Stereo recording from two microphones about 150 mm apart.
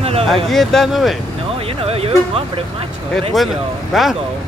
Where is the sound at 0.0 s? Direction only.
40° right (ahead or behind).